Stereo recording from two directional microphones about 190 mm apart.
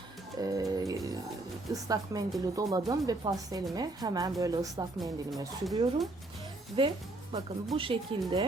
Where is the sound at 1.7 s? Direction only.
20° right (ahead or behind).